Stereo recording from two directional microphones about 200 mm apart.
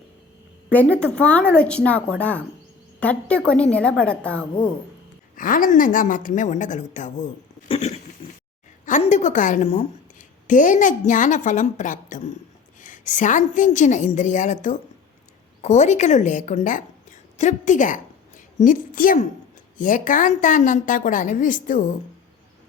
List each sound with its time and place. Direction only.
0.7 s a woman's voice: 5° left (ahead or behind)
5.4 s a woman's voice: 45° left (ahead or behind)
8.2 s a sound: 25° left (ahead or behind)
8.9 s a woman's voice: 40° left (ahead or behind)